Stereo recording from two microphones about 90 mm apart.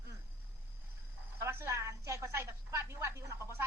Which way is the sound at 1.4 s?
25° right (ahead or behind).